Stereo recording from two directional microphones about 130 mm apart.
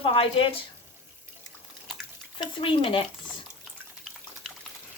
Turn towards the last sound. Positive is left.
turn(degrees=5)  # may be behind; listen again after turning